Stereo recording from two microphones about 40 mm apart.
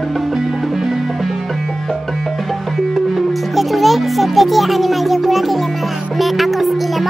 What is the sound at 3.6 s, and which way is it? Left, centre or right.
Speech, centre.